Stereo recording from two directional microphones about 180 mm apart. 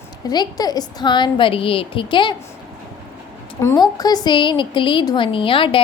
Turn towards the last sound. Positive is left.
turn(degrees=30)  # may be behind; listen again after turning